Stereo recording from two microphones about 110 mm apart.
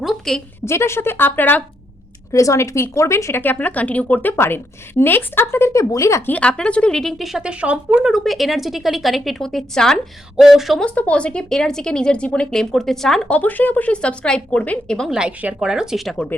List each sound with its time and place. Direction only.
0.0 s a woman's voice: centre (ahead or behind)
0.6 s speech: 25° left (ahead or behind)
2.3 s speech: 30° left (ahead or behind)
6.3 s speech: 10° left (ahead or behind)
10.8 s speech: 10° left (ahead or behind)
15.1 s speech: 10° right (ahead or behind)